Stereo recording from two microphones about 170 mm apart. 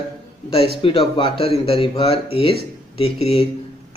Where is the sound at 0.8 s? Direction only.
30° left (ahead or behind).